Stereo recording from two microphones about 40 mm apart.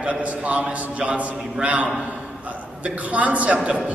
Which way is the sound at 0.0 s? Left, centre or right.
Right.